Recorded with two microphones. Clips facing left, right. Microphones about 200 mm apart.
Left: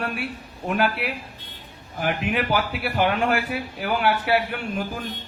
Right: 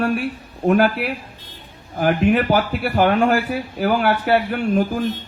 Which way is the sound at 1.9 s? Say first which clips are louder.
Right 8 dB; 40° right (ahead or behind).